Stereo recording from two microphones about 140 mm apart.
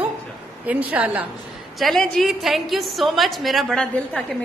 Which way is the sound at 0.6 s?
10° right (ahead or behind).